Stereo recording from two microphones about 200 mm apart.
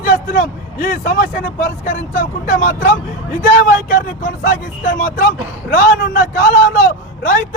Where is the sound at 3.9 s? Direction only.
45° left (ahead or behind).